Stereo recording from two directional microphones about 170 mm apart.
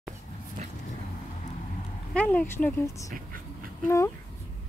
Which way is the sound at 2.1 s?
10° left (ahead or behind).